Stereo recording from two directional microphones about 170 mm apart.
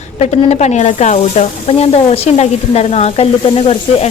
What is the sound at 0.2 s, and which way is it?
Speech, 40° left (ahead or behind).